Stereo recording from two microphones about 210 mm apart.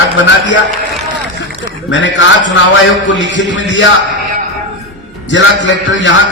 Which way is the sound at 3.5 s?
60° left (ahead or behind).